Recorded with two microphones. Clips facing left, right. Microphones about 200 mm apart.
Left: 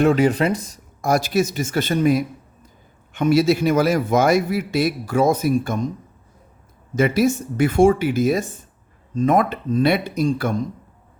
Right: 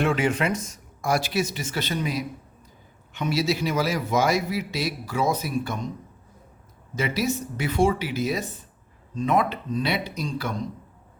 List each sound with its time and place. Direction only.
0.0 s a man's voice: 40° left (ahead or behind)
6.9 s a man's voice: 50° left (ahead or behind)